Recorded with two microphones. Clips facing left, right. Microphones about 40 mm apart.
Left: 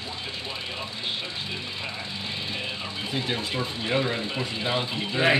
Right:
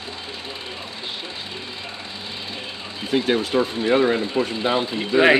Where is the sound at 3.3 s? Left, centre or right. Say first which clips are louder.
Right 9 dB; right.